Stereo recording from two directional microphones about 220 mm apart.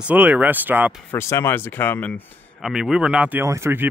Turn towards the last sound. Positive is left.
turn(degrees=-10)  # may be behind; listen again after turning